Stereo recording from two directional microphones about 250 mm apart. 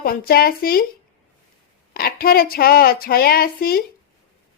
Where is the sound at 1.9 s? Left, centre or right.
Left.